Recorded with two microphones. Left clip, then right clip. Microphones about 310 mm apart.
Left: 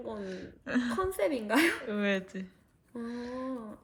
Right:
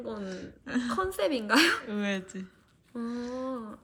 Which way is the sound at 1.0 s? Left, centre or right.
Centre.